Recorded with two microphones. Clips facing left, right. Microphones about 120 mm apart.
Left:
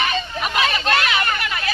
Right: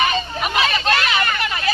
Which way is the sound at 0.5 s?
Centre (ahead or behind).